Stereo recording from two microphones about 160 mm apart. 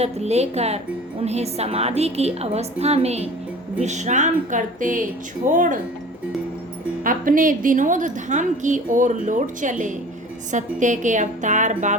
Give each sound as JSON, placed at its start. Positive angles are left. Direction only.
{"t": 0.0, "sound": "a woman's voice", "side_deg": -45}
{"t": 7.0, "sound": "a woman's voice", "side_deg": -60}